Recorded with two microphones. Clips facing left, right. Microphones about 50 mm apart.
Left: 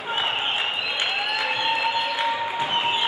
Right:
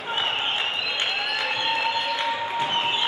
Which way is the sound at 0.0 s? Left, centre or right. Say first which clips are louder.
Left 1 dB; centre.